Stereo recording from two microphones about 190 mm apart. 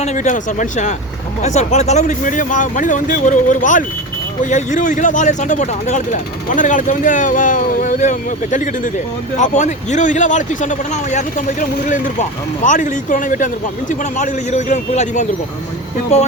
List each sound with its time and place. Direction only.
0.0 s speech: 40° left (ahead or behind)